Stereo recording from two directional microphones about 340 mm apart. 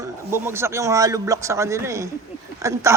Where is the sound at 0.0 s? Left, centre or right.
Centre.